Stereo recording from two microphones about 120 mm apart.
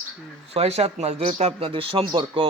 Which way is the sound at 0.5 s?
55° right (ahead or behind).